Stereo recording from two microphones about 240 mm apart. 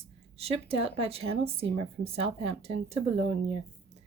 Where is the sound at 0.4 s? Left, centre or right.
Right.